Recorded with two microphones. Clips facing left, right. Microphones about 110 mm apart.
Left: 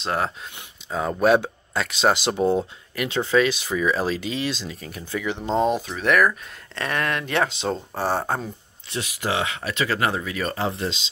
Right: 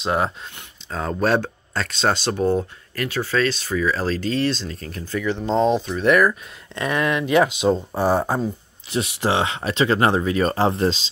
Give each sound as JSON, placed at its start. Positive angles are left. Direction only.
{"t": 0.0, "sound": "speech", "side_deg": -5}
{"t": 0.8, "sound": "speech", "side_deg": 10}
{"t": 8.9, "sound": "speech", "side_deg": -30}